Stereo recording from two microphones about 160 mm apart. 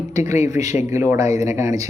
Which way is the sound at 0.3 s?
45° left (ahead or behind).